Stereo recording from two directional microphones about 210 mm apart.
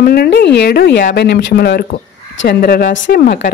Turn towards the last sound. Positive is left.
turn(degrees=55)  # may be behind; listen again after turning